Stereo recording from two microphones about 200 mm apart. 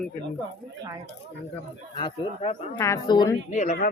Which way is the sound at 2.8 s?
15° left (ahead or behind).